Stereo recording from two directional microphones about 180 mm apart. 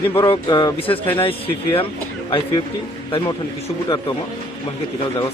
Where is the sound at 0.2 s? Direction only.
25° left (ahead or behind).